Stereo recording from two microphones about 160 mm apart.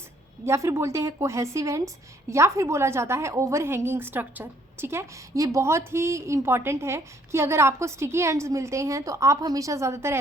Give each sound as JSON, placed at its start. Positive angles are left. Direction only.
{"t": 0.4, "sound": "a woman's voice", "side_deg": -15}